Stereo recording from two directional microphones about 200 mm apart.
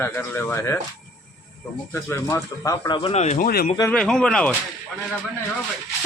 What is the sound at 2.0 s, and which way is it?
Speech, 15° left (ahead or behind).